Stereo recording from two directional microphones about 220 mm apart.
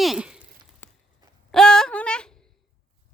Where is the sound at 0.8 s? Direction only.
10° left (ahead or behind).